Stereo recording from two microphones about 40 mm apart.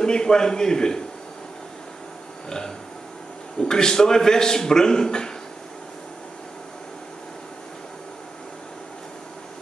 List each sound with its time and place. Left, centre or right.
0.0 s a man's voice: centre
3.5 s a man's voice: centre